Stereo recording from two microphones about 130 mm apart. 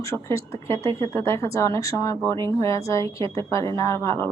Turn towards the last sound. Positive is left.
turn(degrees=20)  # may be behind; listen again after turning